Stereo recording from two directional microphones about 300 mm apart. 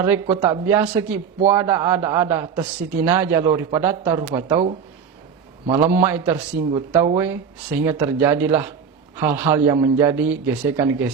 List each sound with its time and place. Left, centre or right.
0.0 s a man's voice: centre
5.9 s a man's voice: centre
6.7 s a man's voice: centre
7.8 s a man's voice: centre